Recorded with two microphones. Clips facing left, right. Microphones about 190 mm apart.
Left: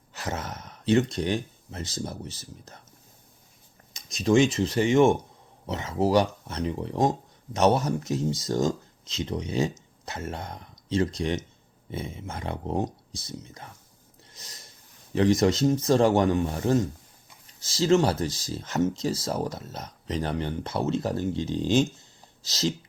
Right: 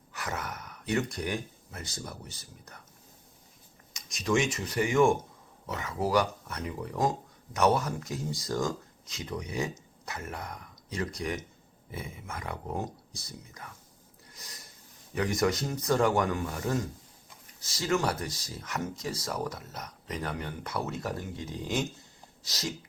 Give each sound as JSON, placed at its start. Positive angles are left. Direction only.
{"t": 0.1, "sound": "speech", "side_deg": 25}
{"t": 4.1, "sound": "speech", "side_deg": 30}
{"t": 14.3, "sound": "a sound", "side_deg": 25}
{"t": 15.1, "sound": "speech", "side_deg": 25}